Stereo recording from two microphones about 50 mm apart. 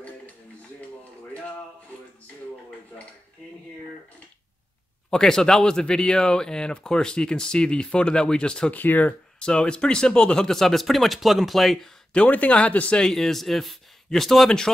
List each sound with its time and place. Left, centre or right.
5.1 s speech: centre
8.7 s speech: left
9.4 s speech: centre
12.3 s speech: left
13.0 s speech: centre